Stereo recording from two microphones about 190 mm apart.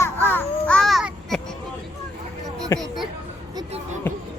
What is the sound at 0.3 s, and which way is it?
Babbling, 10° left (ahead or behind).